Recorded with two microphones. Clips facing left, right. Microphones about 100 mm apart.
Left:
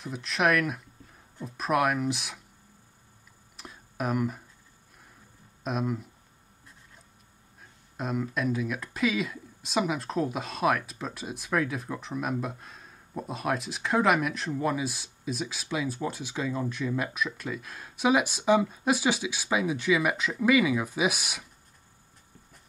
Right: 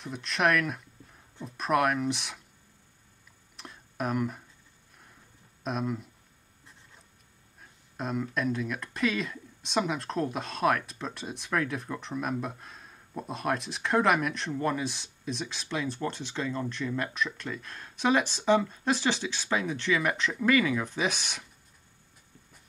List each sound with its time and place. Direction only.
0.0 s speech: centre (ahead or behind)
3.5 s a sound: centre (ahead or behind)
5.6 s speech: 5° left (ahead or behind)
8.0 s speech: 5° left (ahead or behind)